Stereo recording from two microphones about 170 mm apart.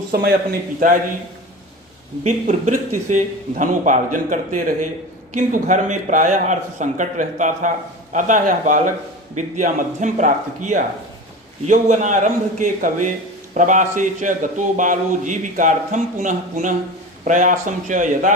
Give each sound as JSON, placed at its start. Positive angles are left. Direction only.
{"t": 0.1, "sound": "a man's voice", "side_deg": -65}
{"t": 2.2, "sound": "a man's voice", "side_deg": -45}